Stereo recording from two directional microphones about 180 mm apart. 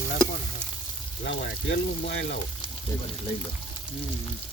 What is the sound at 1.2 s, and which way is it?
Speech, 75° left (ahead or behind).